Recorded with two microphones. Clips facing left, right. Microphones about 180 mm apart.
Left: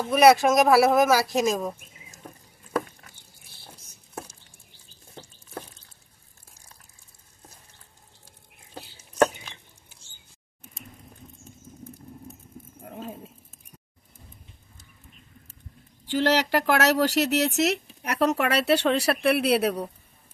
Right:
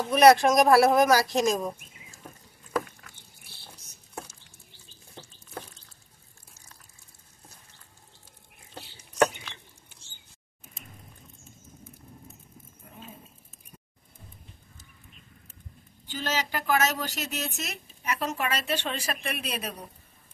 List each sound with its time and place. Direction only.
0.1 s speech: 5° left (ahead or behind)
16.1 s speech: 80° left